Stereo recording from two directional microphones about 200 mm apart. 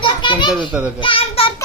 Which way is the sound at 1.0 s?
25° left (ahead or behind).